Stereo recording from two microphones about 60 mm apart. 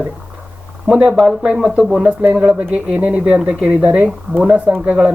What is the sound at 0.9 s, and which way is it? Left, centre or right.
Speech, centre.